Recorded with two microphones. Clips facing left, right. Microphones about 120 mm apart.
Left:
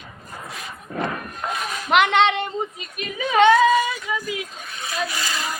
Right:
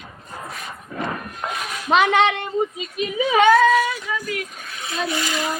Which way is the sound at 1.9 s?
10° right (ahead or behind).